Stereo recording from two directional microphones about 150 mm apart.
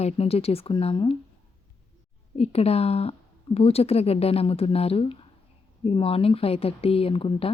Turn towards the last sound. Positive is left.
turn(degrees=35)  # may be behind; listen again after turning